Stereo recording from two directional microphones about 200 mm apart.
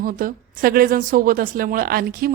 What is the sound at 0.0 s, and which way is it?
A man's voice, 45° right (ahead or behind).